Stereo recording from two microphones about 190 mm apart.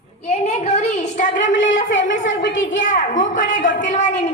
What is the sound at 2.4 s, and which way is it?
Speech, 80° left.